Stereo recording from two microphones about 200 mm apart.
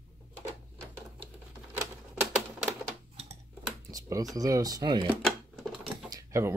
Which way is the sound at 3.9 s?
20° right (ahead or behind).